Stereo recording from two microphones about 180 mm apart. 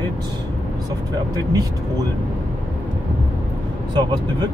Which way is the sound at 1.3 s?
20° right (ahead or behind).